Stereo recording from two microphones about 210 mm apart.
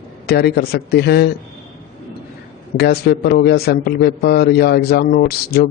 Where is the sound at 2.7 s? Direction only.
50° left (ahead or behind).